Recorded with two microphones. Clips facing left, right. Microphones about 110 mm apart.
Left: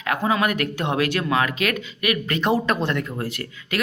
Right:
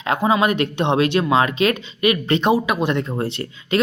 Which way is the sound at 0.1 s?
20° right (ahead or behind).